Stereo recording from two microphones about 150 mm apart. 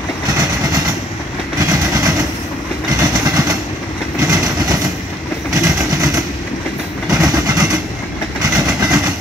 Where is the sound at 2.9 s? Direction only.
25° right (ahead or behind).